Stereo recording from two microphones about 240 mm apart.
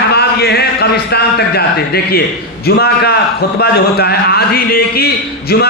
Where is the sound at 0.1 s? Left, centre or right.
Left.